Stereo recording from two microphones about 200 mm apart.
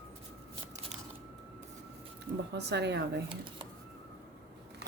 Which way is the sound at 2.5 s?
60° right (ahead or behind).